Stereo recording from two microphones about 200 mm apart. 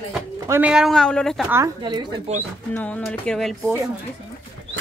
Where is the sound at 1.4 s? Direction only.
10° right (ahead or behind).